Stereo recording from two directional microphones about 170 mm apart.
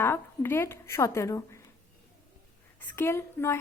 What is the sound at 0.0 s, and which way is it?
A woman's voice, 15° left (ahead or behind).